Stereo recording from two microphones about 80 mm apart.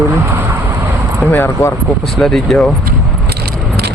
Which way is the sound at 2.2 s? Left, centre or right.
Centre.